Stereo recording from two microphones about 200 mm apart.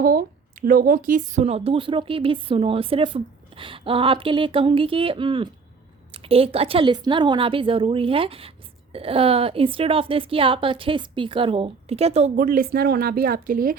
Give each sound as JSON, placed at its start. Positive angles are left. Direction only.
{"t": 0.0, "sound": "a woman's voice", "side_deg": -45}